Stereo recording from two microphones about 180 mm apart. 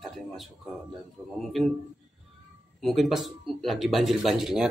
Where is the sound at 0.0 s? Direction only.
Centre (ahead or behind).